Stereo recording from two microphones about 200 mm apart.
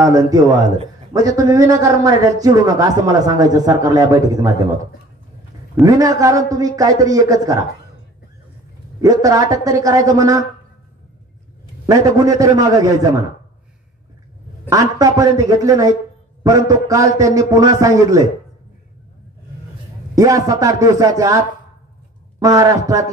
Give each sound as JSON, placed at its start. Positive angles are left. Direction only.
{"t": 0.0, "sound": "speech", "side_deg": -15}
{"t": 5.8, "sound": "speech", "side_deg": -15}
{"t": 9.0, "sound": "speech", "side_deg": -15}
{"t": 11.8, "sound": "speech", "side_deg": -15}
{"t": 14.7, "sound": "speech", "side_deg": -15}
{"t": 20.2, "sound": "speech", "side_deg": -15}